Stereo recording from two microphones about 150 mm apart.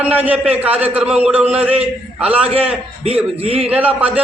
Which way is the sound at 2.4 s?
40° right (ahead or behind).